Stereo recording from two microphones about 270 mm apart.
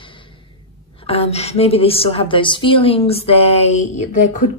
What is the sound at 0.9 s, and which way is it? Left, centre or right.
A woman's voice, left.